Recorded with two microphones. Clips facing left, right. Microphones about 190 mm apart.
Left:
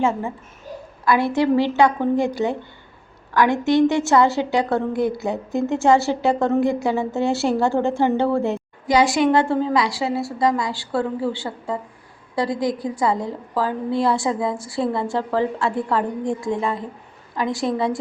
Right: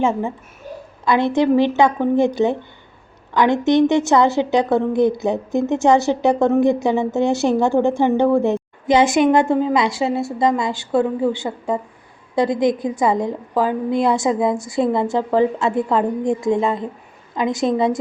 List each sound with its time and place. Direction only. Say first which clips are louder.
0.0 s a woman's voice: right 2 dB; 15° right (ahead or behind)